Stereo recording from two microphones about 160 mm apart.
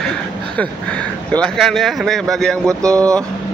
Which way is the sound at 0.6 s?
10° left (ahead or behind).